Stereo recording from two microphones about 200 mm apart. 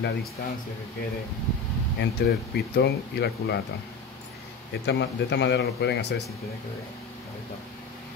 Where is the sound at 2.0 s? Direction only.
50° left (ahead or behind).